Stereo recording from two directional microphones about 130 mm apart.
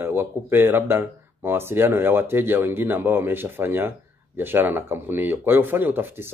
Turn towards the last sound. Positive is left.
turn(degrees=-15)  # may be behind; listen again after turning